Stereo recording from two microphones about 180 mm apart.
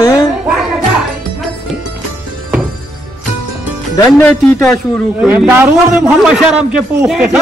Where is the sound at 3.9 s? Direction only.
10° left (ahead or behind).